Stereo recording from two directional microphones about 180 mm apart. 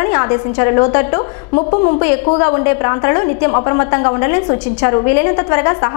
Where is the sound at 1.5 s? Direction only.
40° left (ahead or behind).